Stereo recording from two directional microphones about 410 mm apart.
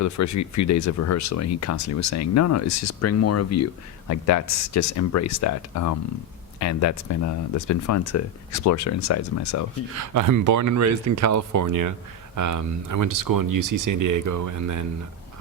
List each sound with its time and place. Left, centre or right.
0.0 s speech: left
9.9 s speech: right